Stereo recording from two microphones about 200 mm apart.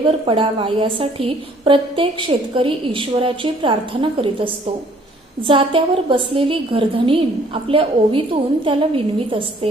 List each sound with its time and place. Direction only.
0.3 s a woman's voice: 25° right (ahead or behind)